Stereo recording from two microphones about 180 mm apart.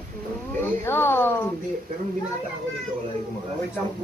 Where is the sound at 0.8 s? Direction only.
10° left (ahead or behind).